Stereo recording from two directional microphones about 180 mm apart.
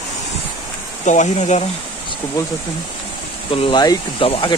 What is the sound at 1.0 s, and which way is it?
Speech, 40° left (ahead or behind).